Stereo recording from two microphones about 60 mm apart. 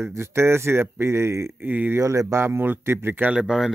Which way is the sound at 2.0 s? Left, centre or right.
Right.